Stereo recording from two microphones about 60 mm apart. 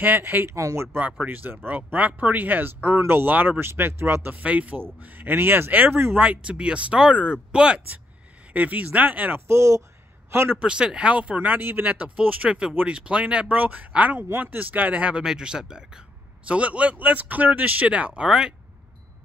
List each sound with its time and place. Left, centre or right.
0.0 s speech: right
0.6 s speech: right
1.2 s speech: right
4.4 s speech: right
6.1 s speech: right
9.5 s a man's voice: right
10.6 s speech: centre
15.2 s speech: centre